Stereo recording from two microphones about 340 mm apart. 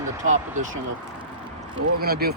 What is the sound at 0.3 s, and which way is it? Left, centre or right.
Speech, right.